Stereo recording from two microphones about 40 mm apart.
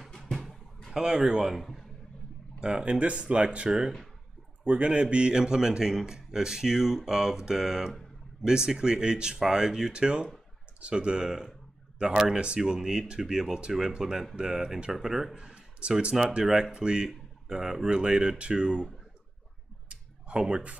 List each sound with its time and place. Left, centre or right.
0.1 s a sound: centre
0.9 s a man's voice: centre
1.5 s a man's voice: centre
2.6 s a man's voice: right
15.3 s a sound: right
16.1 s a man's voice: centre
16.7 s speech: right
17.8 s speech: right
19.9 s a sound: right